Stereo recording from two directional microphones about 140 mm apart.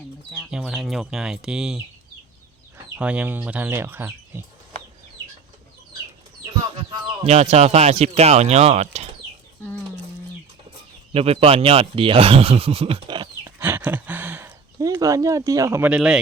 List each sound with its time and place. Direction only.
0.3 s speech: centre (ahead or behind)
3.0 s speech: 10° right (ahead or behind)
7.3 s speech: 50° right (ahead or behind)
11.1 s speech: 45° right (ahead or behind)
13.6 s a sound: 15° right (ahead or behind)
15.9 s speech: 5° right (ahead or behind)